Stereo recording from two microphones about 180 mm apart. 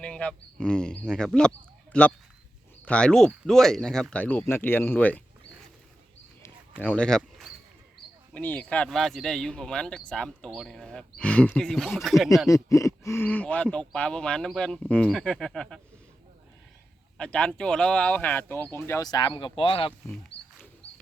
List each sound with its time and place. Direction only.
0.0 s speech: 5° left (ahead or behind)
6.4 s a sound: 10° left (ahead or behind)
8.3 s speech: 10° left (ahead or behind)
12.5 s speech: 20° left (ahead or behind)
17.2 s speech: 5° left (ahead or behind); by 19.9 s 30° left (ahead or behind)
20.3 s wild animals: 65° left (ahead or behind)